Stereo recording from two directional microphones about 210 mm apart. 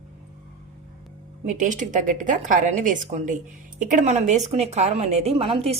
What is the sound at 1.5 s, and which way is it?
A woman's voice, 35° right (ahead or behind).